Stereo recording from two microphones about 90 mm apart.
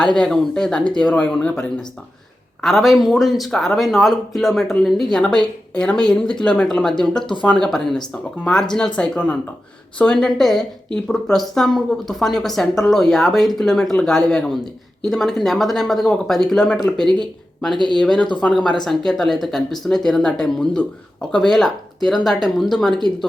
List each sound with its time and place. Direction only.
0.0 s speech: 5° left (ahead or behind)
2.6 s speech: centre (ahead or behind)
17.7 s speech: 55° right (ahead or behind)
18.0 s speech: 10° left (ahead or behind)